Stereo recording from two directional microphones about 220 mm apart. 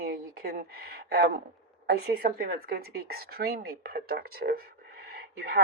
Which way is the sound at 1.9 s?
45° right (ahead or behind).